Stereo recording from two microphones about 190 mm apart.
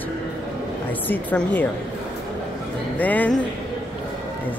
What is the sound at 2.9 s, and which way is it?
Speech, 10° left (ahead or behind).